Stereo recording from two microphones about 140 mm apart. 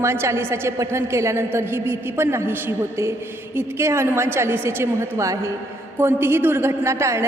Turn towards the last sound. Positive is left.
turn(degrees=-20)  # may be behind; listen again after turning